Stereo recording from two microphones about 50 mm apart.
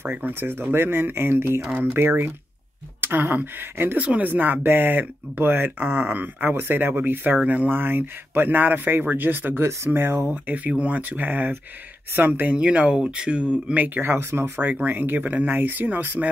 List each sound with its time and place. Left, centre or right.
0.1 s speech: right
4.0 s speech: right
4.3 s speech: right
7.4 s speech: right
7.7 s speech: right
10.4 s speech: right
12.5 s speech: right
13.7 s speech: right
14.7 s speech: right